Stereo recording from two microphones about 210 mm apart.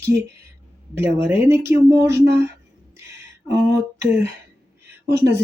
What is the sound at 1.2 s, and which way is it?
Speech, 10° right (ahead or behind).